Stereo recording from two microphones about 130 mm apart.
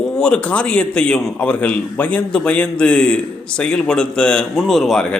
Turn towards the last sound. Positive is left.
turn(degrees=5)  # may be behind; listen again after turning